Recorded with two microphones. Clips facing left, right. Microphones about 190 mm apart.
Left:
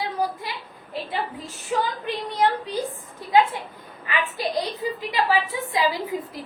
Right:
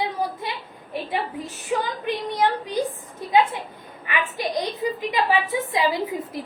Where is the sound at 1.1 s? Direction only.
20° right (ahead or behind).